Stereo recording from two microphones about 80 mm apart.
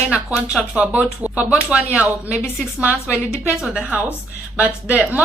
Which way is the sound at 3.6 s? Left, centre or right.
Centre.